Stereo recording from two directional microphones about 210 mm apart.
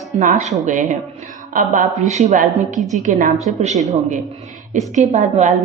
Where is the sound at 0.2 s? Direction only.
35° right (ahead or behind).